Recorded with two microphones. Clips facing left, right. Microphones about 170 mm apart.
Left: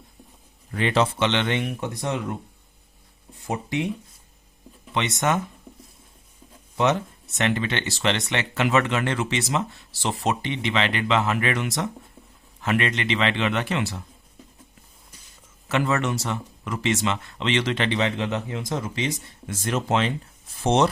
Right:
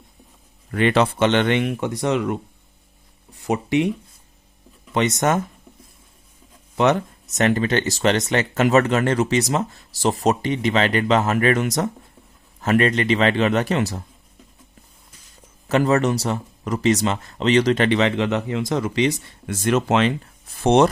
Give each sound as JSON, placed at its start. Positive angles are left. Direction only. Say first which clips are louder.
{"t": 0.7, "sound": "speech", "louder": "right 4 dB", "side_deg": -60}
{"t": 1.5, "sound": "speech", "louder": "right 5 dB", "side_deg": -75}
{"t": 3.4, "sound": "speech", "louder": "right 7 dB", "side_deg": -80}
{"t": 4.9, "sound": "speech", "louder": "right 4 dB", "side_deg": -45}
{"t": 6.7, "sound": "speech", "louder": "right 4 dB", "side_deg": -60}
{"t": 7.3, "sound": "speech", "louder": "right 6 dB", "side_deg": -40}
{"t": 15.7, "sound": "speech", "louder": "right 6 dB", "side_deg": -40}
{"t": 17.9, "sound": "speech", "louder": "right 5 dB", "side_deg": -70}